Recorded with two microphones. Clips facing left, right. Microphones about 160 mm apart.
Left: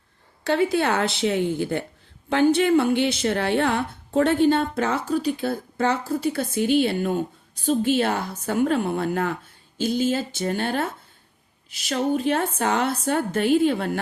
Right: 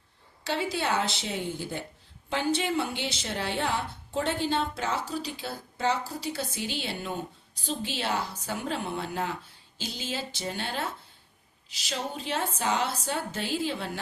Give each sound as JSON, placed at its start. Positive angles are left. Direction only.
{"t": 0.4, "sound": "a woman's voice", "side_deg": 55}